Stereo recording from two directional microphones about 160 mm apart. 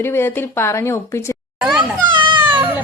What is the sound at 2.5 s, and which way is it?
Baby cry, 30° right (ahead or behind).